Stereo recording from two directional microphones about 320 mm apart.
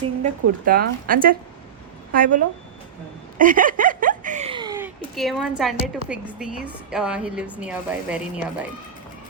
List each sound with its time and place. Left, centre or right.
0.2 s speech: right
3.3 s a sound: right
5.1 s a woman's voice: centre